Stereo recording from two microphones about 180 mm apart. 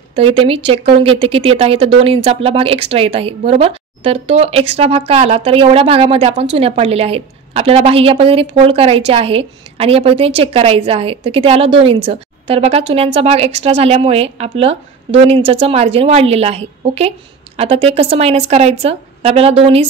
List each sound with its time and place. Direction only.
0.1 s a woman's voice: 30° right (ahead or behind)